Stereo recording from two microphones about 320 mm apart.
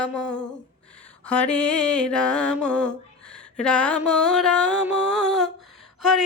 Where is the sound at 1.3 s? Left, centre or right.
Centre.